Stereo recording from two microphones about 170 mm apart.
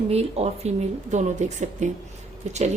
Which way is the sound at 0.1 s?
35° right (ahead or behind).